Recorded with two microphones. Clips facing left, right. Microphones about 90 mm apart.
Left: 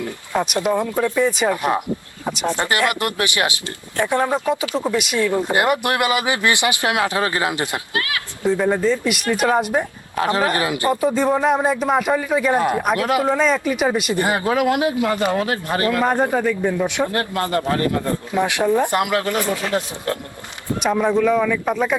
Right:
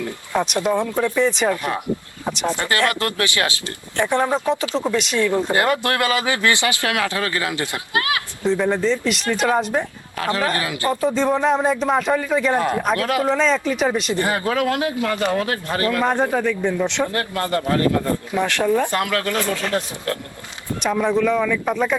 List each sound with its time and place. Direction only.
0.3 s speech: 5° left (ahead or behind)
2.2 s a sound: 10° left (ahead or behind)
2.6 s speech: 20° left (ahead or behind)
3.9 s speech: 10° left (ahead or behind)
8.4 s speech: 10° left (ahead or behind)
10.2 s speech: 25° left (ahead or behind)
11.0 s speech: 10° left (ahead or behind)
14.1 s speech: 20° left (ahead or behind)
16.0 s speech: 5° left (ahead or behind)
17.1 s speech: 25° left (ahead or behind)
18.3 s speech: 15° left (ahead or behind)